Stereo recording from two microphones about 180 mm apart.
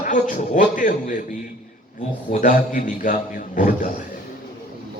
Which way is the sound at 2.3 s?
45° left (ahead or behind).